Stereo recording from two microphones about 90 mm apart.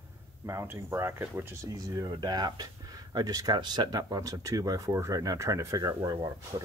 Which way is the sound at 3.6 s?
50° right (ahead or behind).